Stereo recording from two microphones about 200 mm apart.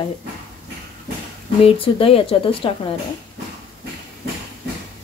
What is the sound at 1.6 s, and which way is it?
A woman's voice, 25° left (ahead or behind).